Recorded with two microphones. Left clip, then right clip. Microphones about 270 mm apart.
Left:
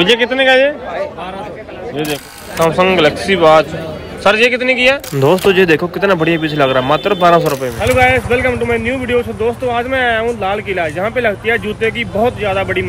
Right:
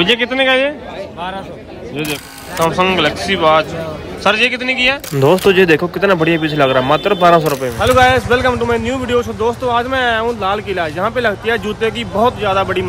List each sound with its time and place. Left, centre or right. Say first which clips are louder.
0.0 s a man's voice: left 2 dB; right
2.0 s speech: left 1 dB; centre
7.8 s speech: right 1 dB; centre